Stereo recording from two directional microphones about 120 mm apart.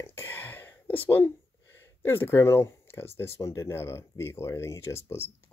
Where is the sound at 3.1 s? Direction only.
20° left (ahead or behind).